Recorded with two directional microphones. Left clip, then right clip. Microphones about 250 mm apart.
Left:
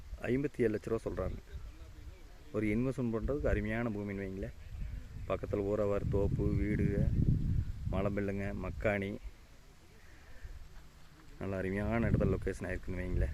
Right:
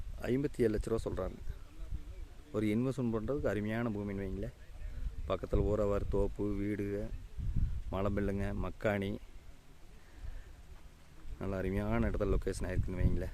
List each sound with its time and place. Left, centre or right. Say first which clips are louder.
0.2 s speech: even; centre
2.5 s speech: even; centre
11.3 s speech: even; centre